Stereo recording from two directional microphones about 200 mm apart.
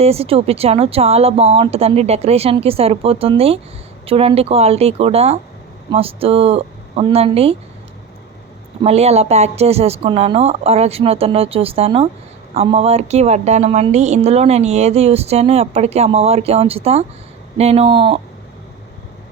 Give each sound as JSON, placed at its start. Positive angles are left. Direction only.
{"t": 0.0, "sound": "speech", "side_deg": -30}
{"t": 8.8, "sound": "a woman's voice", "side_deg": -30}